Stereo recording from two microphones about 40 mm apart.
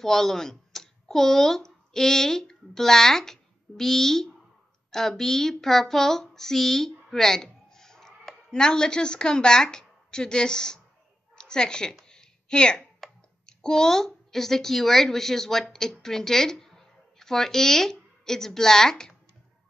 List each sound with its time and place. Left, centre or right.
0.0 s a woman's voice: centre
12.1 s a sound: centre
13.5 s a woman's voice: centre